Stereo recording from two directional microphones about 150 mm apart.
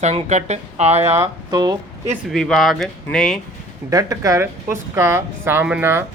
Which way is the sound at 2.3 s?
5° left (ahead or behind).